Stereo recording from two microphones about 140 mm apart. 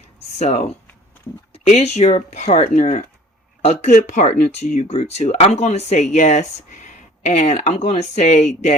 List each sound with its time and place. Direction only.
0.3 s speech: 50° left (ahead or behind)
3.6 s speech: 50° left (ahead or behind)